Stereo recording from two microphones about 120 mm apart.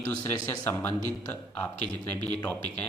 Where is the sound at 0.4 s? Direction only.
15° left (ahead or behind).